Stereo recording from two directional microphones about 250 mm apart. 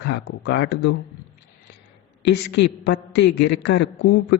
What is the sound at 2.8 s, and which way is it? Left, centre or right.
Speech, left.